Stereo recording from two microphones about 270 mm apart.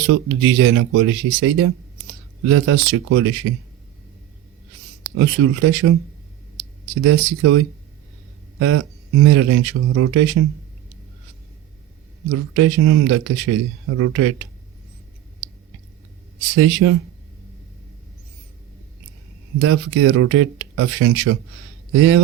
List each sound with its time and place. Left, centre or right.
0.1 s speech: right
5.1 s speech: right
7.0 s speech: right
12.5 s speech: right
16.6 s speech: right
19.5 s speech: right